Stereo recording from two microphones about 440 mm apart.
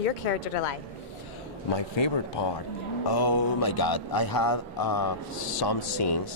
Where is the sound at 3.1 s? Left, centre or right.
Left.